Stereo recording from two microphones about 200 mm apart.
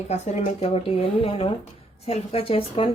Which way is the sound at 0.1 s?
35° left (ahead or behind).